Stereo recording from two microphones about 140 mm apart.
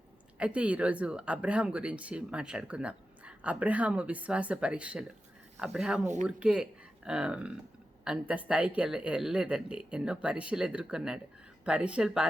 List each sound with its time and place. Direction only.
0.3 s speech: 10° right (ahead or behind)